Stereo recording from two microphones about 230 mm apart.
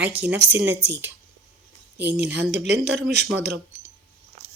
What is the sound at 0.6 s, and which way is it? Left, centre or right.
Speech, right.